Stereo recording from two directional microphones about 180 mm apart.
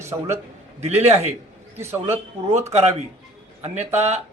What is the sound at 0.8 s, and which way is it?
Speech, 35° right (ahead or behind).